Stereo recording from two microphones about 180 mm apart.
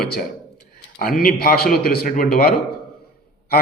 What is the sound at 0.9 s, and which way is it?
A man's voice, 50° left (ahead or behind).